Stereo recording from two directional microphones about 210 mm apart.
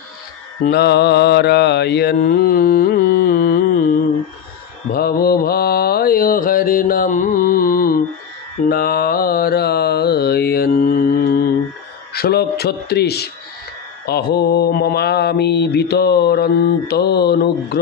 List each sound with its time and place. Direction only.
0.7 s mantra: 50° left (ahead or behind)